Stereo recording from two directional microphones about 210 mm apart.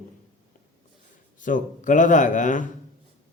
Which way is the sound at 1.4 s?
40° left (ahead or behind).